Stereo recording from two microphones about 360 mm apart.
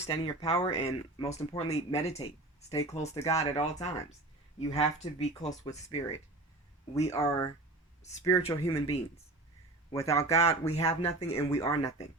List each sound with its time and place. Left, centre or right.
0.0 s speech: centre